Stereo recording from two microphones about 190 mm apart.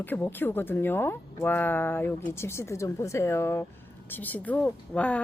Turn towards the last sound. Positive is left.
turn(degrees=5)  # may be behind; listen again after turning